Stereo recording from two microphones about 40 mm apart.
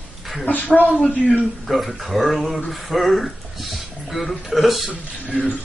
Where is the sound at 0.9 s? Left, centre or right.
Left.